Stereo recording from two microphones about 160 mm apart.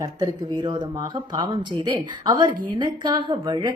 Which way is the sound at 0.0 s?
25° right (ahead or behind).